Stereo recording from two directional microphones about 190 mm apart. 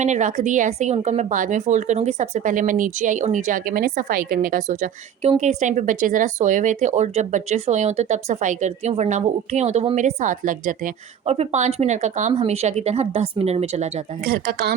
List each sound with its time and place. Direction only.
0.0 s speech: 40° right (ahead or behind)
14.3 s speech: 55° right (ahead or behind)